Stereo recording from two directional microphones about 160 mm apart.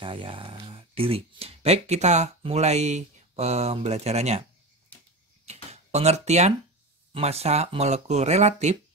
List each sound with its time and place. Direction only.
0.0 s speech: 35° right (ahead or behind)
5.4 s a sound: 45° right (ahead or behind)
7.2 s speech: 40° right (ahead or behind)